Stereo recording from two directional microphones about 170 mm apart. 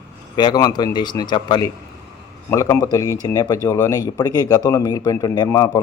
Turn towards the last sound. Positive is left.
turn(degrees=20)  # may be behind; listen again after turning